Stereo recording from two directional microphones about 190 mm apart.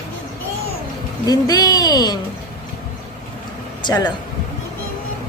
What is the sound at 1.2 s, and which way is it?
Speech, 20° left (ahead or behind).